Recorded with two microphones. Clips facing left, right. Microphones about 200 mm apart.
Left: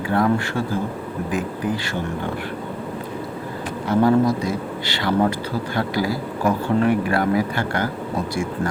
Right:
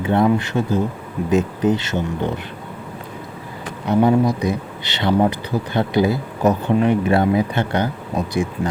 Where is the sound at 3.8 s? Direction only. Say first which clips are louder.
Right 1 dB; 20° right (ahead or behind).